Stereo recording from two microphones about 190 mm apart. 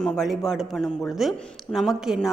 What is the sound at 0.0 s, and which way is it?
A woman's voice, centre (ahead or behind).